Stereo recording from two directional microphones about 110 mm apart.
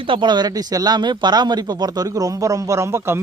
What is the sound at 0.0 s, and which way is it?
Speech, 50° right (ahead or behind).